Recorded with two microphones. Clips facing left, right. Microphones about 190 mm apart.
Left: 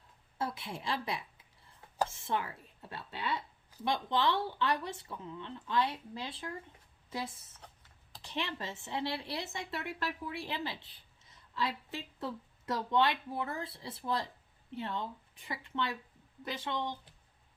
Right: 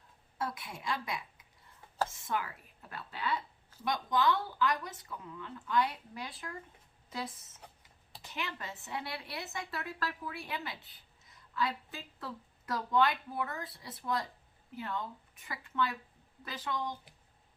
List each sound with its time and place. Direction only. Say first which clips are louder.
0.3 s a woman's voice: left 1 dB; 30° left (ahead or behind)
7.6 s a sound: right 1 dB; 10° right (ahead or behind)
8.3 s a woman's voice: left 3 dB; 30° left (ahead or behind)